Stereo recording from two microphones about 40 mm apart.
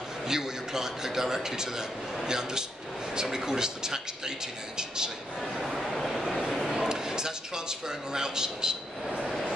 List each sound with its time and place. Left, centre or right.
0.3 s a man's voice: centre
5.4 s a sound: centre
6.9 s a man's voice: centre
9.2 s vehicle: centre